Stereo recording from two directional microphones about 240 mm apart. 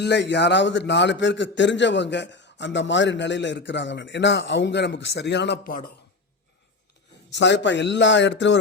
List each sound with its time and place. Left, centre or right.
0.0 s a man's voice: left
7.3 s a man's voice: left